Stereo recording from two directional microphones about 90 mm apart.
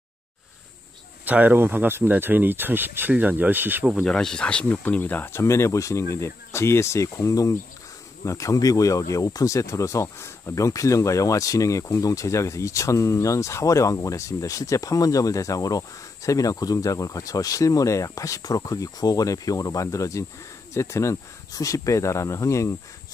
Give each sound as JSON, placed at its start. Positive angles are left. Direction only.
{"t": 1.2, "sound": "speech", "side_deg": -20}
{"t": 4.0, "sound": "speech", "side_deg": 5}